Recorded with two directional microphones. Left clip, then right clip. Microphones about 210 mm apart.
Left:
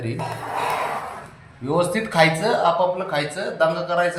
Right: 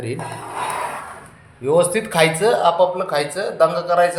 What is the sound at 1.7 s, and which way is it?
Speech, 40° right (ahead or behind).